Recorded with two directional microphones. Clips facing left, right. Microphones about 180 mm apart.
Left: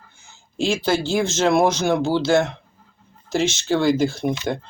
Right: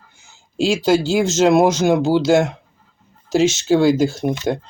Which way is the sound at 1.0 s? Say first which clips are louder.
Right 4 dB; 40° right (ahead or behind).